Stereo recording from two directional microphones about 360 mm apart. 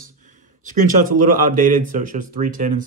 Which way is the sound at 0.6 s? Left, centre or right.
Right.